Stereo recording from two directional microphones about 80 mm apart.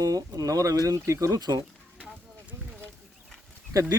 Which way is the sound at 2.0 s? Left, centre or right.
Right.